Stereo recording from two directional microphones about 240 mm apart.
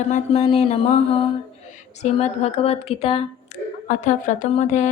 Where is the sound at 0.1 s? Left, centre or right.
Left.